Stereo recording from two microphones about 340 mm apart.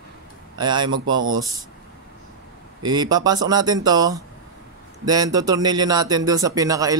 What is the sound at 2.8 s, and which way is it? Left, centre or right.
Speech, centre.